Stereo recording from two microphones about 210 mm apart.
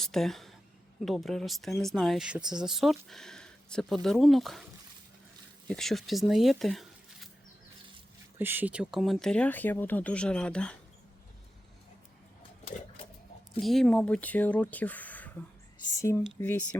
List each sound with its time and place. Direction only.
0.0 s speech: centre (ahead or behind)
5.6 s speech: centre (ahead or behind)
8.4 s speech: 10° right (ahead or behind)
12.4 s sewing machine: 25° left (ahead or behind)
13.6 s speech: centre (ahead or behind)